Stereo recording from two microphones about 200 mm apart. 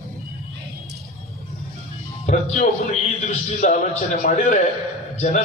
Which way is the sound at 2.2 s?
35° left (ahead or behind).